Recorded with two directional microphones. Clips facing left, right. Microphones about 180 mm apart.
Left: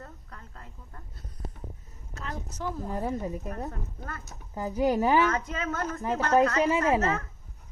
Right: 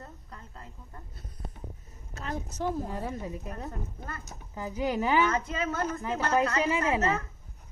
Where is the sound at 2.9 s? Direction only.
45° left (ahead or behind).